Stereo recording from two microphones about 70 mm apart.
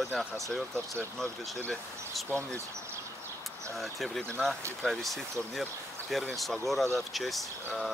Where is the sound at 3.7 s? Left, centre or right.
Centre.